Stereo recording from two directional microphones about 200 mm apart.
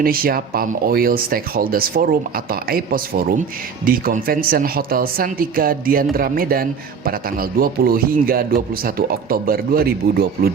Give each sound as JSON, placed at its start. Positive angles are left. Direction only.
{"t": 0.0, "sound": "speech", "side_deg": -45}